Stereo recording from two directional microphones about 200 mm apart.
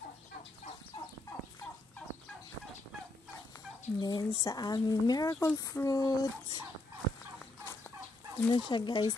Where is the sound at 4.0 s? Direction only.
20° left (ahead or behind).